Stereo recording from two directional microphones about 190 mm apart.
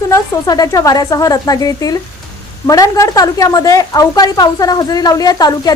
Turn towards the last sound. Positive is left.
turn(degrees=20)  # may be behind; listen again after turning